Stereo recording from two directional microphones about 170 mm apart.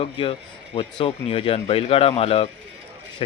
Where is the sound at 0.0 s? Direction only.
30° left (ahead or behind).